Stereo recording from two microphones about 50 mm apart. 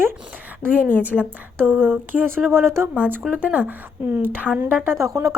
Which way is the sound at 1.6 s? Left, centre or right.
Right.